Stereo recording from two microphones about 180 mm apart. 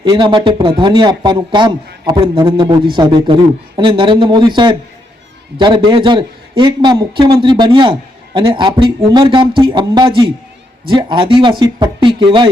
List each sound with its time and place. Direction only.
0.0 s a man's voice: 25° right (ahead or behind)